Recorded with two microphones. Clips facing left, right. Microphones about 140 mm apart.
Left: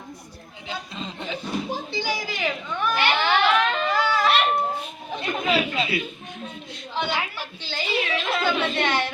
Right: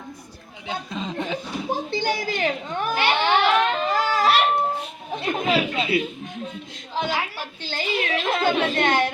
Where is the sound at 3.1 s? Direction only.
25° right (ahead or behind).